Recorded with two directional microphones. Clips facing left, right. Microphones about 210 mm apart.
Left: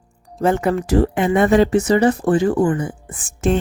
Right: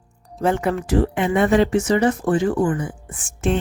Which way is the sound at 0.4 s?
40° left (ahead or behind).